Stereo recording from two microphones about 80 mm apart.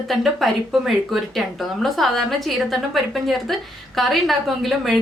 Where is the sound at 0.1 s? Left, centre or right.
Centre.